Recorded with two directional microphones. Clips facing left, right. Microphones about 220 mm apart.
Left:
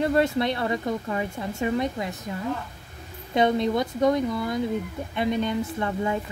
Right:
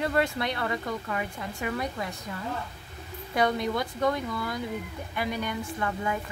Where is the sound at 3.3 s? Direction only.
25° left (ahead or behind).